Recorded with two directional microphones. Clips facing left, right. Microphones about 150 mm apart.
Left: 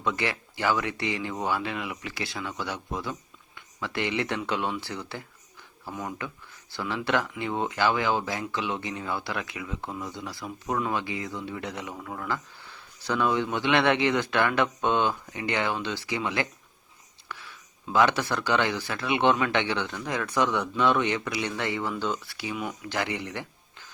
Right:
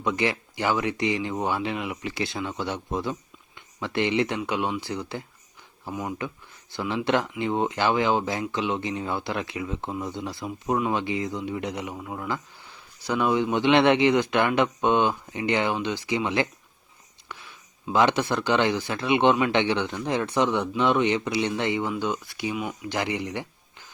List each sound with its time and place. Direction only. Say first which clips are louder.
0.0 s speech: right 4 dB; 20° right (ahead or behind)
17.3 s a sound: even; 20° right (ahead or behind)
17.9 s speech: right 2 dB; 20° right (ahead or behind)